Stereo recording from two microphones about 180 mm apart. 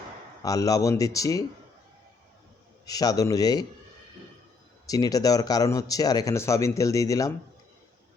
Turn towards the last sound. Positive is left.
turn(degrees=20)  # may be behind; listen again after turning